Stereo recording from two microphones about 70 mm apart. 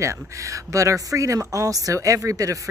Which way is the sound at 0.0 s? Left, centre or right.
Right.